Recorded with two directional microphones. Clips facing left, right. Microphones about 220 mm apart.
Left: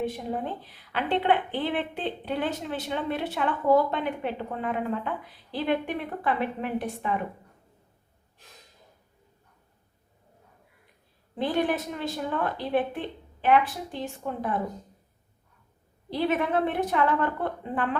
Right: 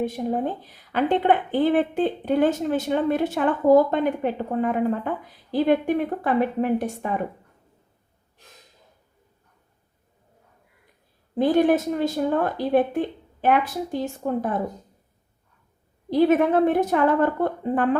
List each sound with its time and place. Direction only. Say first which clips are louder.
0.0 s a woman's voice: right 6 dB; 40° right (ahead or behind)
11.3 s a woman's voice: right 8 dB; 45° right (ahead or behind)
16.0 s a woman's voice: right 8 dB; 45° right (ahead or behind)